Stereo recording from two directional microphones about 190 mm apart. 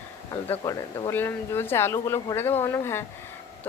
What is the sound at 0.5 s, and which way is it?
A woman's voice, 20° left (ahead or behind).